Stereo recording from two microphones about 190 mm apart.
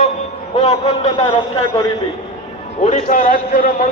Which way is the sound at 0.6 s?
35° left (ahead or behind).